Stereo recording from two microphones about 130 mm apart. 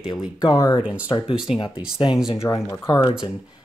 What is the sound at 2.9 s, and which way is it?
Speech, 40° left (ahead or behind).